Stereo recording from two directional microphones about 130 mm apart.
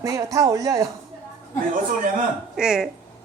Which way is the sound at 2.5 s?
5° right (ahead or behind).